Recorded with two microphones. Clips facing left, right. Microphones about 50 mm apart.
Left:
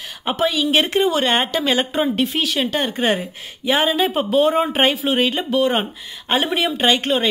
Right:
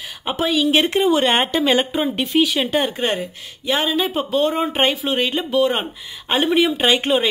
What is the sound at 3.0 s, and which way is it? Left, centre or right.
Speech, centre.